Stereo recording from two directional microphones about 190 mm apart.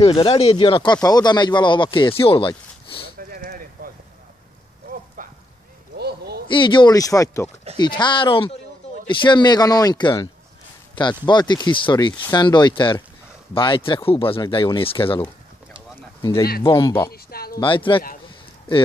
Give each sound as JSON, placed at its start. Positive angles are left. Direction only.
{"t": 0.0, "sound": "speech", "side_deg": 30}
{"t": 3.2, "sound": "a sound", "side_deg": -50}
{"t": 5.2, "sound": "clip-clop", "side_deg": -45}
{"t": 5.9, "sound": "a sound", "side_deg": -55}
{"t": 6.4, "sound": "speech", "side_deg": 25}
{"t": 16.2, "sound": "speech", "side_deg": 15}
{"t": 16.6, "sound": "speech", "side_deg": 25}
{"t": 17.1, "sound": "a sound", "side_deg": 55}
{"t": 17.6, "sound": "speech", "side_deg": 25}